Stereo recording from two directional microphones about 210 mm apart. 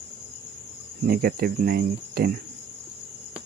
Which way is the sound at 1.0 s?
45° right (ahead or behind).